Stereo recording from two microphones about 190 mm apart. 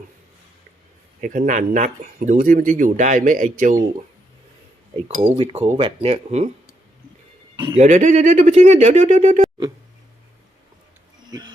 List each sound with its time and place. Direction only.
1.2 s speech: 45° right (ahead or behind)
5.4 s speech: 30° right (ahead or behind)
7.5 s a man's voice: 25° right (ahead or behind)
7.8 s speech: 40° right (ahead or behind)
11.3 s speech: 20° right (ahead or behind)